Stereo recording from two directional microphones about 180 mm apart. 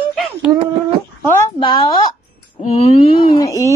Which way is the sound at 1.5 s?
25° left (ahead or behind).